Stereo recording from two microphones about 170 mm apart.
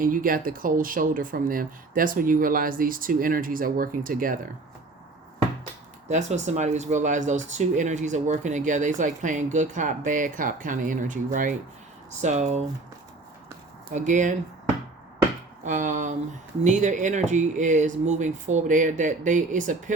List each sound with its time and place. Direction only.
0.0 s speech: 55° right (ahead or behind)
6.1 s speech: 45° right (ahead or behind)
13.9 s speech: 45° right (ahead or behind)
15.6 s speech: 45° right (ahead or behind)